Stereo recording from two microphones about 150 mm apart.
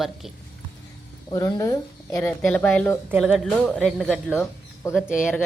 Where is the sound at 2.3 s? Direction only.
5° left (ahead or behind).